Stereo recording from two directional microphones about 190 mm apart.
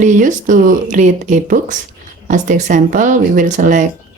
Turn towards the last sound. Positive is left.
turn(degrees=-40)  # may be behind; listen again after turning